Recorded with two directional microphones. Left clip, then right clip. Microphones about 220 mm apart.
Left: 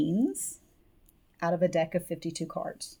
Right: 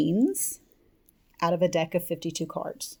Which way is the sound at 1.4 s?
40° right (ahead or behind).